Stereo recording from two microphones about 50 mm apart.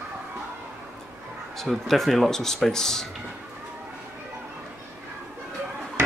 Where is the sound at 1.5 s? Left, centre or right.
Centre.